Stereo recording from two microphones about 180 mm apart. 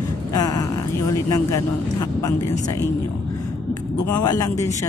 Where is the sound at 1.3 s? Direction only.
20° left (ahead or behind).